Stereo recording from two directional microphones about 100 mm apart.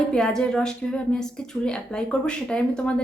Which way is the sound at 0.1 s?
5° left (ahead or behind).